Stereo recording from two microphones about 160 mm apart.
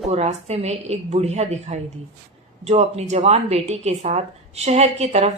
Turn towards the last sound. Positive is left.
turn(degrees=-40)  # may be behind; listen again after turning